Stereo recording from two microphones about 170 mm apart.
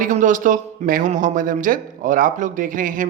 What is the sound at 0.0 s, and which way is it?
Speech, 50° right (ahead or behind).